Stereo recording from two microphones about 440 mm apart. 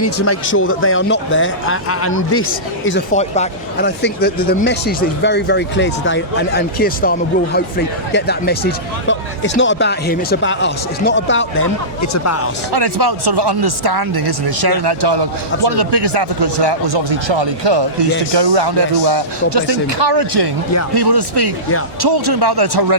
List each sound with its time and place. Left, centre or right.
0.0 s speech: left
3.2 s speech: centre; by 12.5 s left
12.7 s speech: right